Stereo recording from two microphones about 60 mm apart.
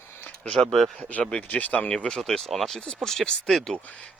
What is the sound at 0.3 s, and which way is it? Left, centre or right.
Speech, centre.